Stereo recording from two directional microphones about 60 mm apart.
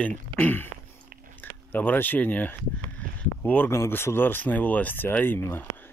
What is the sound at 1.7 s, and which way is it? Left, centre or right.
Speech, left.